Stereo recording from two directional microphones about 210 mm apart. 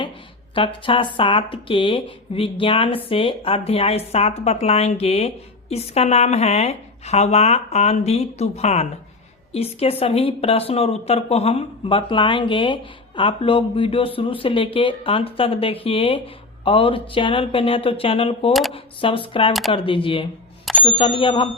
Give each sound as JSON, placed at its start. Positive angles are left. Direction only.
{"t": 0.5, "sound": "speech", "side_deg": 25}